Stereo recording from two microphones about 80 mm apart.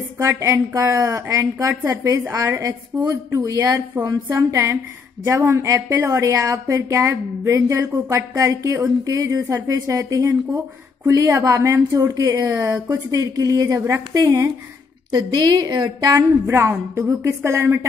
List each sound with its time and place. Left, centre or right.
0.3 s a woman's voice: right
13.1 s a woman's voice: right
13.7 s a woman's voice: right
15.1 s a woman's voice: right
16.1 s a woman's voice: right